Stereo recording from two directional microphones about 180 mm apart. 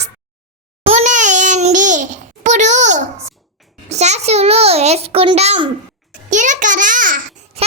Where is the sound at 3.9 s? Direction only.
40° right (ahead or behind).